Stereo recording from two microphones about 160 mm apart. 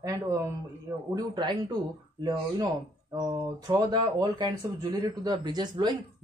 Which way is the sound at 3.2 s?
25° right (ahead or behind).